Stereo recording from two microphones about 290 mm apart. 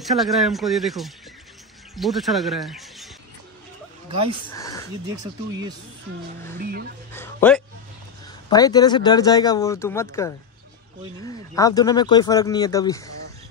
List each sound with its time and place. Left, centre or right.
0.0 s speech: centre
5.0 s speech: centre
6.6 s speech: right
7.1 s speech: centre
11.5 s speech: centre